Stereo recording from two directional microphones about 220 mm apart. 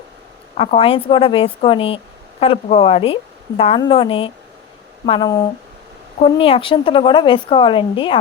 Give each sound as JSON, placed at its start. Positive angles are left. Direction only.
{"t": 0.5, "sound": "a woman's voice", "side_deg": 25}